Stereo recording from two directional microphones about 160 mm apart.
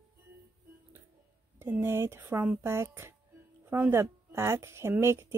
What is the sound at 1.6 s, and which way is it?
Speech, 15° right (ahead or behind).